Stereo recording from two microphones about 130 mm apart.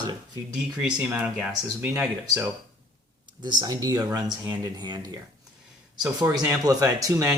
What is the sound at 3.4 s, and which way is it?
Speech, 30° right (ahead or behind).